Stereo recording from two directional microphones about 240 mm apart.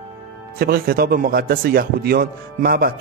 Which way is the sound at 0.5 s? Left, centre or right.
Right.